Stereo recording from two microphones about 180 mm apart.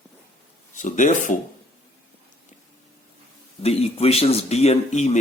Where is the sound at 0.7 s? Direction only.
45° left (ahead or behind).